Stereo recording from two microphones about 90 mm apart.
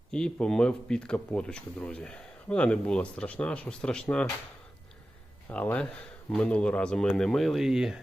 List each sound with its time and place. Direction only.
0.1 s speech: 10° left (ahead or behind)
5.5 s speech: 20° left (ahead or behind); by 8.0 s 5° right (ahead or behind)